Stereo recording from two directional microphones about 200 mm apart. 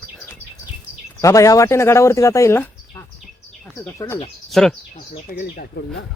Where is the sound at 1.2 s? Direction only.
15° left (ahead or behind).